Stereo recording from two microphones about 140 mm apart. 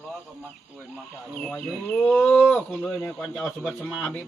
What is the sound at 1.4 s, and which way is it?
A man's voice, 10° left (ahead or behind).